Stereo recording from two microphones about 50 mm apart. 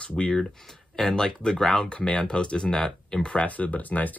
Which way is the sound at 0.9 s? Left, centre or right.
Centre.